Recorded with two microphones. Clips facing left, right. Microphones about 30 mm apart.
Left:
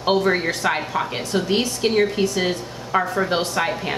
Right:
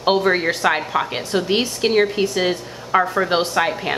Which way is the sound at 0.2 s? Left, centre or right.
Right.